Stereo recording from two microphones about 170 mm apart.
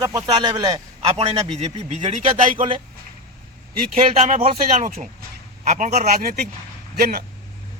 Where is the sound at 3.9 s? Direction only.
40° right (ahead or behind).